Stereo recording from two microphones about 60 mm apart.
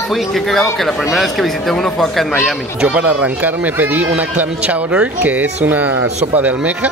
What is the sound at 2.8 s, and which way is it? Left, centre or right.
Speech, right.